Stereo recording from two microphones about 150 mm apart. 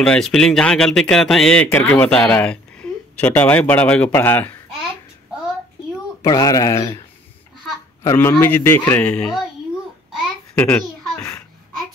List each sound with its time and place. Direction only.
0.0 s speech: 5° left (ahead or behind)
6.2 s a child's voice: 25° left (ahead or behind)
8.0 s a man's voice: 20° left (ahead or behind)
10.5 s babbling: 5° left (ahead or behind)